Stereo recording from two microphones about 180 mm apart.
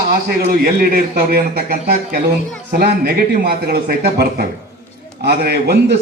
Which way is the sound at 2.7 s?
60° right (ahead or behind).